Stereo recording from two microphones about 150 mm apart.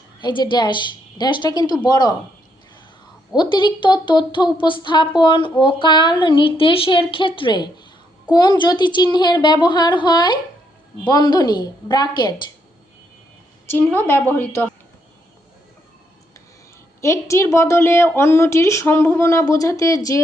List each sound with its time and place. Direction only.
0.2 s a woman's voice: 30° left (ahead or behind)
3.3 s a woman's voice: 30° left (ahead or behind)
13.7 s a woman's voice: 15° left (ahead or behind)
17.0 s a woman's voice: 20° left (ahead or behind)